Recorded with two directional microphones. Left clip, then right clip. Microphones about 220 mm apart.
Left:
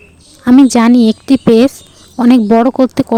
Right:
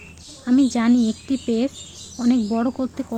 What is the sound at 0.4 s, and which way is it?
Speech, 45° left (ahead or behind).